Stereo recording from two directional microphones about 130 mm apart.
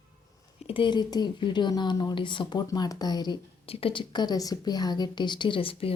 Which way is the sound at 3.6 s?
45° left (ahead or behind).